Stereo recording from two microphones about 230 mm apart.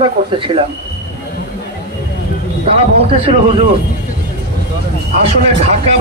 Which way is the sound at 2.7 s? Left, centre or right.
Right.